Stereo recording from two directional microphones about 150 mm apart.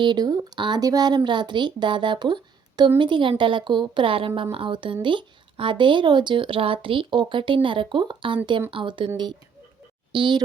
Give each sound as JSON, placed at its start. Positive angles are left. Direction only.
{"t": 0.0, "sound": "speech", "side_deg": -30}